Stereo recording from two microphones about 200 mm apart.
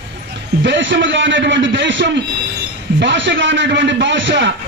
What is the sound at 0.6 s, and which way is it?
A man's voice, 65° right (ahead or behind).